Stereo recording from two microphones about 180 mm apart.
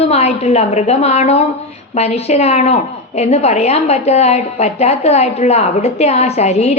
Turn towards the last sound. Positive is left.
turn(degrees=35)  # may be behind; listen again after turning